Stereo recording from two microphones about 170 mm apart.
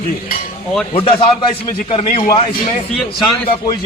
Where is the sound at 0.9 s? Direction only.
30° left (ahead or behind).